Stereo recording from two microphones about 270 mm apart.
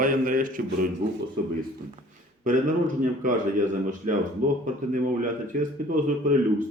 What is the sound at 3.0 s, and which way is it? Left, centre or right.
A man's voice, right.